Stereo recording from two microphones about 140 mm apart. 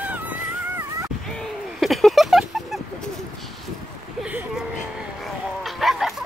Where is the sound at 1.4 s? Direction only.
Centre (ahead or behind).